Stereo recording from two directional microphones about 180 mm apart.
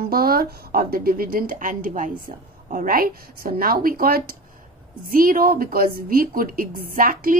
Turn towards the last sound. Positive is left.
turn(degrees=-50)  # may be behind; listen again after turning